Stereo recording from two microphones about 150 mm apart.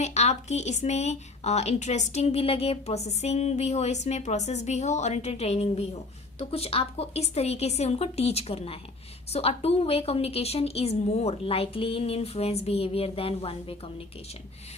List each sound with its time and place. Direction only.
0.0 s a woman's voice: 50° left (ahead or behind)